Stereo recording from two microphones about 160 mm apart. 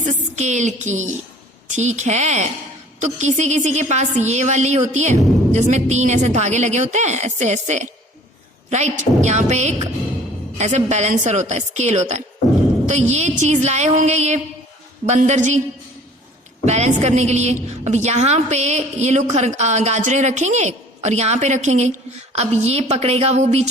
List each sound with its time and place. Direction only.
0.0 s a woman's voice: 45° right (ahead or behind)
16.6 s a woman's voice: 45° right (ahead or behind)